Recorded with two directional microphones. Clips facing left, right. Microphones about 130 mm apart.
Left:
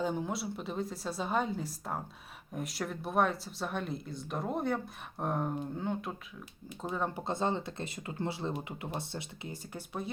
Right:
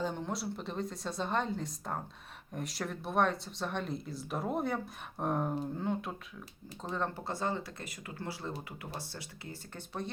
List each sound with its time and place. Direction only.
0.0 s speech: 5° left (ahead or behind)
7.3 s speech: 20° left (ahead or behind)